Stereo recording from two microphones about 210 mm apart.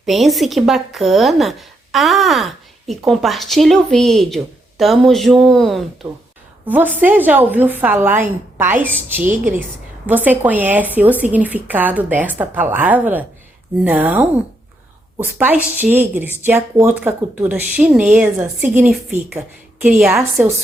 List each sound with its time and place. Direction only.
0.0 s speech: centre (ahead or behind)